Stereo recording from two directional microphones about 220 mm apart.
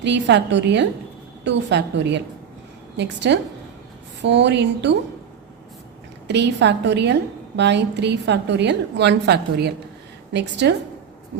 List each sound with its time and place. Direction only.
0.0 s a woman's voice: 50° right (ahead or behind)
6.2 s a woman's voice: 50° right (ahead or behind)